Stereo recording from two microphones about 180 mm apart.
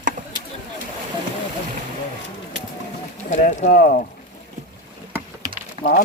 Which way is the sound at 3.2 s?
45° left (ahead or behind).